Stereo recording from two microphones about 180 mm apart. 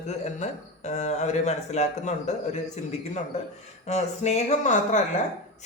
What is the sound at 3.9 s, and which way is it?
Speech, 40° left (ahead or behind).